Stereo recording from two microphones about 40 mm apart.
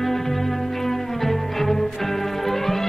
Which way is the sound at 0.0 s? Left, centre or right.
Centre.